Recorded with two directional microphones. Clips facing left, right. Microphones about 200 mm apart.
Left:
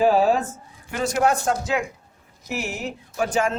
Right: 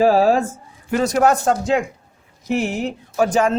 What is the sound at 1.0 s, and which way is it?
Speech, 40° right (ahead or behind).